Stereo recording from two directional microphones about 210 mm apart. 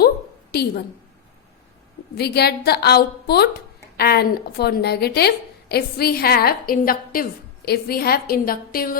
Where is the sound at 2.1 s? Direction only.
50° left (ahead or behind).